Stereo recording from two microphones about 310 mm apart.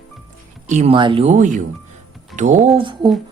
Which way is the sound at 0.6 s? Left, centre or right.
Right.